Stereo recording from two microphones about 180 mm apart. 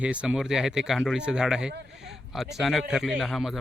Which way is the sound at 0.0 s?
5° right (ahead or behind).